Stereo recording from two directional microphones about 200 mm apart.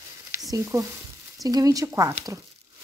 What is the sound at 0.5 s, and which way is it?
Speech, 15° right (ahead or behind).